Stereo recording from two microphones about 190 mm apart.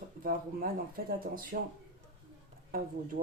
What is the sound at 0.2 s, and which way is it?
Speech, 50° right (ahead or behind).